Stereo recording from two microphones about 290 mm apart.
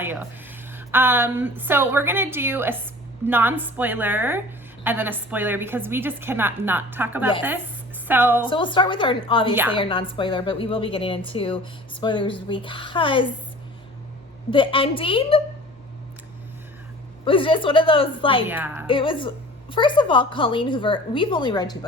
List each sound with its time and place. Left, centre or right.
0.0 s a woman's voice: centre
8.4 s a woman's voice: centre
14.5 s a woman's voice: centre
17.2 s a woman's voice: centre
18.4 s a woman's voice: centre
18.9 s a woman's voice: centre